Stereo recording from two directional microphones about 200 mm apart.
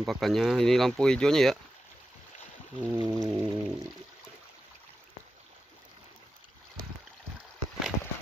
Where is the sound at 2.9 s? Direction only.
20° right (ahead or behind).